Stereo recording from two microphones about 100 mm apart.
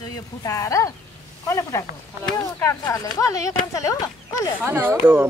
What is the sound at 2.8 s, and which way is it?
Speech, 35° left (ahead or behind).